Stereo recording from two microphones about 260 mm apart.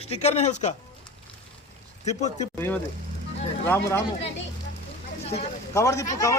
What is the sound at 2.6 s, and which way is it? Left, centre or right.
Speech, centre.